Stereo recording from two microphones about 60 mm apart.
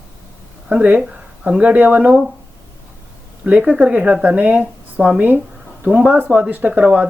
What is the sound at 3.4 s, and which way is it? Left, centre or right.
Speech, right.